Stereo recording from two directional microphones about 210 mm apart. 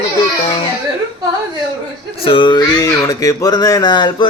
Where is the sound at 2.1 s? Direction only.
25° left (ahead or behind).